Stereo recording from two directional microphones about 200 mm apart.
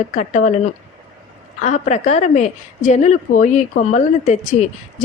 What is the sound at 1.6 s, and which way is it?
A woman's voice, 35° left (ahead or behind).